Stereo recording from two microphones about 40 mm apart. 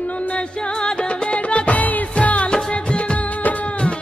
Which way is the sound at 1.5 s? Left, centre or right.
Left.